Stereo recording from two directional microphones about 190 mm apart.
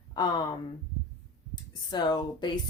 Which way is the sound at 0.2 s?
25° left (ahead or behind).